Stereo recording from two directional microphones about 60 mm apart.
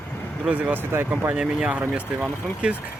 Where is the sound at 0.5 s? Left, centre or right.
Right.